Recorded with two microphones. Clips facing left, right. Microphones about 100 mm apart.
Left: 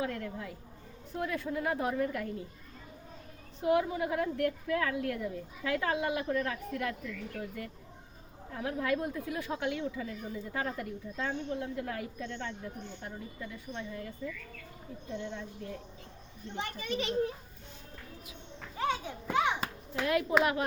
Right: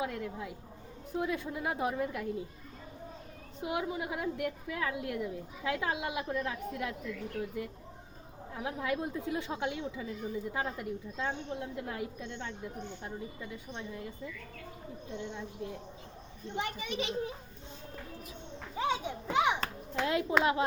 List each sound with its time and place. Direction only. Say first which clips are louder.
0.0 s a woman's voice: even; 10° right (ahead or behind)
3.6 s a woman's voice: left 6 dB; 15° right (ahead or behind)
15.2 s a woman's voice: even; 15° right (ahead or behind)
18.8 s children playing: even; 20° right (ahead or behind)
19.5 s children playing: right 1 dB; 10° left (ahead or behind)
20.4 s a woman's voice: right 1 dB; 25° right (ahead or behind)